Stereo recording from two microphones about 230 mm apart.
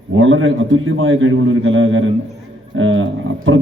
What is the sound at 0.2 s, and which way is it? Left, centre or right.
A man's voice, right.